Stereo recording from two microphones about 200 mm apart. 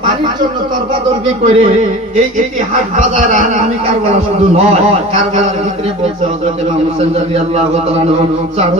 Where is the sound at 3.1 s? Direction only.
40° right (ahead or behind).